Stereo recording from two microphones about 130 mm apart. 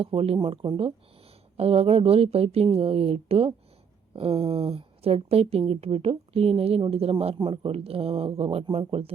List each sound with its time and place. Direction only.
0.0 s a woman's voice: 45° right (ahead or behind)